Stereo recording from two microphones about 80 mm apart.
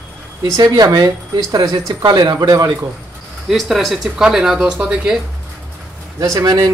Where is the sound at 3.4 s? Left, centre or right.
Centre.